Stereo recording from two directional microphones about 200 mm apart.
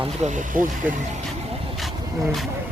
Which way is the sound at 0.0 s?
35° right (ahead or behind).